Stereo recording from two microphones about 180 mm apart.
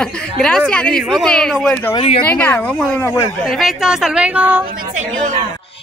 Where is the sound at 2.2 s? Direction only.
10° left (ahead or behind).